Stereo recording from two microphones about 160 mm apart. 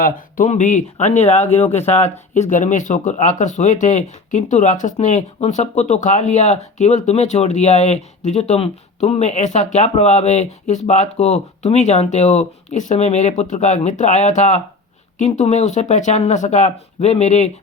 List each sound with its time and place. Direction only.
0.0 s speech: 50° left (ahead or behind)